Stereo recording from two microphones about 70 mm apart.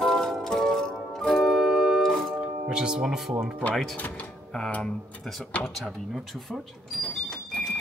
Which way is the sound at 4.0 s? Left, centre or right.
Left.